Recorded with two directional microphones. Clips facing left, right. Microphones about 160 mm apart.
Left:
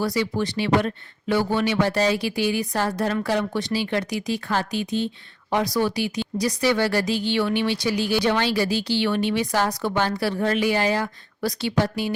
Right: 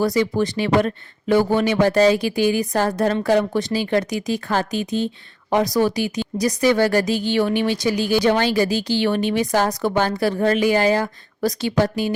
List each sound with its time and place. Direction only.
0.0 s speech: 45° right (ahead or behind)